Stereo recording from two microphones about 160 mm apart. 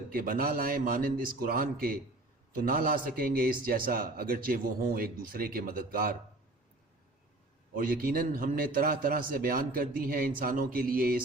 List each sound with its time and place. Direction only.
0.1 s speech: 65° right (ahead or behind)
7.8 s speech: 65° right (ahead or behind)